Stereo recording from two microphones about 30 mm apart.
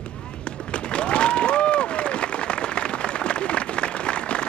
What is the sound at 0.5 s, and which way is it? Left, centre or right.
Applause, left.